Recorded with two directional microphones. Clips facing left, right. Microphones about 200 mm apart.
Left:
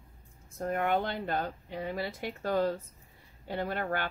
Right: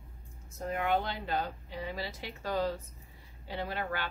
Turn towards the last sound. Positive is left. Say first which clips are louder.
# left 3 dB
turn(degrees=50)  # may be behind; listen again after turning